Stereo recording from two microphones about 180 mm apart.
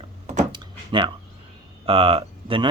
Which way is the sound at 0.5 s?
25° right (ahead or behind).